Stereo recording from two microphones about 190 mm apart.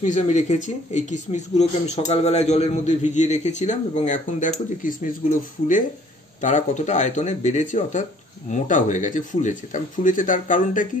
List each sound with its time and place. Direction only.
0.0 s speech: 40° left (ahead or behind)
6.4 s speech: 40° left (ahead or behind)